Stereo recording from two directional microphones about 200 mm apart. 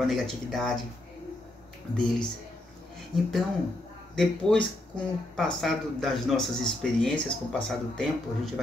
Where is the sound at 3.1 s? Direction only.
20° left (ahead or behind).